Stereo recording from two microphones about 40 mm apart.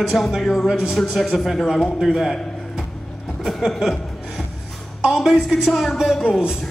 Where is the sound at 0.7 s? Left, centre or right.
Centre.